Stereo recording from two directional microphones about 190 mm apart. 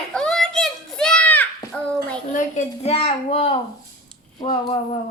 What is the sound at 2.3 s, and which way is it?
A child's voice, 35° left (ahead or behind).